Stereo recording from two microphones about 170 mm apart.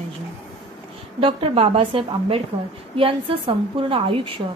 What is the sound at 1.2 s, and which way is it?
A woman's voice, 30° right (ahead or behind).